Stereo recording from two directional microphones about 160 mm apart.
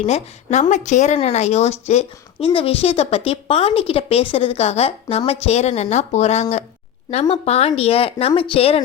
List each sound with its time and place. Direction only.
0.0 s speech: 45° left (ahead or behind)